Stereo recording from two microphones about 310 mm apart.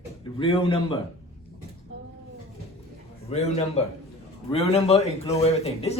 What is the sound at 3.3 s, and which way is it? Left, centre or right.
A man's voice, centre.